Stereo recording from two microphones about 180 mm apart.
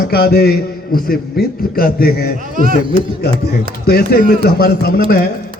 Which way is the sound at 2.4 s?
50° right (ahead or behind).